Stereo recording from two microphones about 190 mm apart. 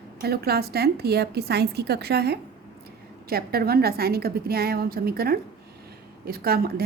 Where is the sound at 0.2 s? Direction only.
55° right (ahead or behind).